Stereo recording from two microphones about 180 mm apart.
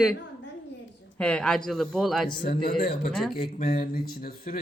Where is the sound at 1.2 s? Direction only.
5° left (ahead or behind).